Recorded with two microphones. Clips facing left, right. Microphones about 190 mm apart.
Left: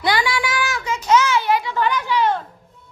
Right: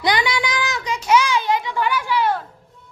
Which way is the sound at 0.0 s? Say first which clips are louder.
Even; 20° right (ahead or behind).